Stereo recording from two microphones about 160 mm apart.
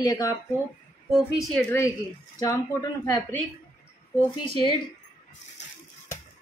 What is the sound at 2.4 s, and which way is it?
Speech, 25° left (ahead or behind).